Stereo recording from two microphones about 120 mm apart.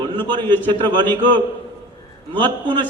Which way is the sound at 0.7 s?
40° right (ahead or behind).